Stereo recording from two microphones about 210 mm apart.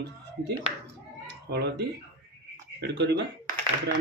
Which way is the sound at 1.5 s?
50° right (ahead or behind).